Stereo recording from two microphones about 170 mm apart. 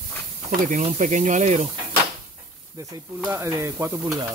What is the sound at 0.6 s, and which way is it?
Speech, 50° right (ahead or behind).